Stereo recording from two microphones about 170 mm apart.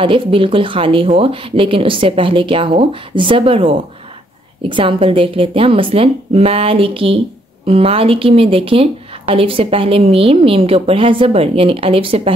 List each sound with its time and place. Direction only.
0.0 s speech: 30° right (ahead or behind)